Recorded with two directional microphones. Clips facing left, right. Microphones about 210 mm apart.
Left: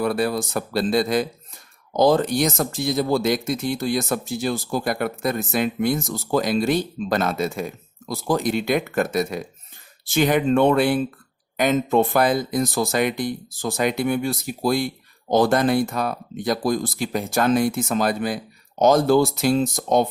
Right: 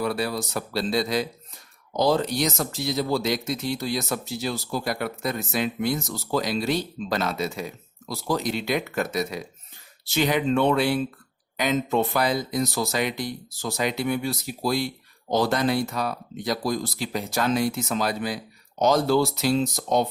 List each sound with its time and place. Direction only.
0.0 s speech: 50° left (ahead or behind)